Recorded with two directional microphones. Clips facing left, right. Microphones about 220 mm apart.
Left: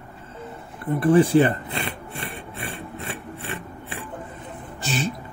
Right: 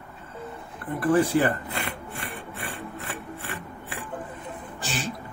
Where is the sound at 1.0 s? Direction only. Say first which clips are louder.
Left 5 dB; 25° left (ahead or behind).